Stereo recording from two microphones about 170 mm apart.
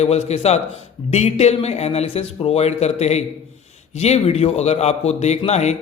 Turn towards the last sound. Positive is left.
turn(degrees=40)  # may be behind; listen again after turning